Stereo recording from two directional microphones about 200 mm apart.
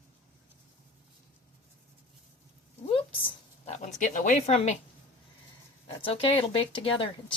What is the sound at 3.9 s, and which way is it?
Speech, 40° left (ahead or behind).